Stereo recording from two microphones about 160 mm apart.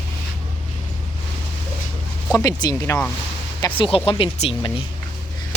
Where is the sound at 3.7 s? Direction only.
35° left (ahead or behind).